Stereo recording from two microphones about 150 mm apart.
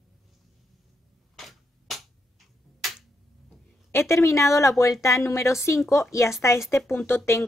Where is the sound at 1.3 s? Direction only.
Centre (ahead or behind).